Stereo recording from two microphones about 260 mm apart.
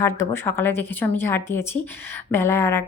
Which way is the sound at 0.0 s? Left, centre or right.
Centre.